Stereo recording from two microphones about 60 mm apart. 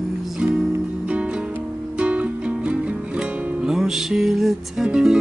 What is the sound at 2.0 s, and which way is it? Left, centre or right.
Music, right.